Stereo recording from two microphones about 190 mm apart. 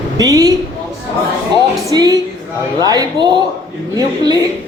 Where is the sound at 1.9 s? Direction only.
20° right (ahead or behind).